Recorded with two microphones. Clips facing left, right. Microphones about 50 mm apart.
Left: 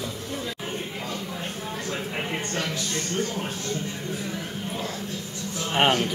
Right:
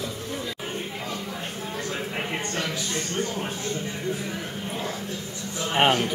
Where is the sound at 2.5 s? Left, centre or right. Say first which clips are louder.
Even; centre.